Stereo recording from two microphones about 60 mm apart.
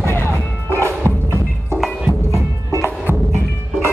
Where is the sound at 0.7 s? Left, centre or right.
Left.